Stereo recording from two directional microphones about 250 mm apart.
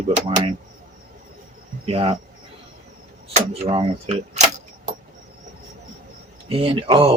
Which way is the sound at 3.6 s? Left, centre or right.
Right.